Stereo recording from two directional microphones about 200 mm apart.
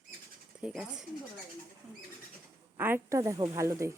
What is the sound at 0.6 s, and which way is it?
Speech, centre (ahead or behind).